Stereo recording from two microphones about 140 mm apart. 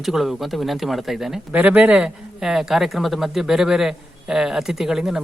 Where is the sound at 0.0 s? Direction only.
Centre (ahead or behind).